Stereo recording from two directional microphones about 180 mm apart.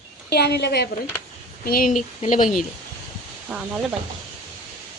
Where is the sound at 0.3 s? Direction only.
65° left (ahead or behind).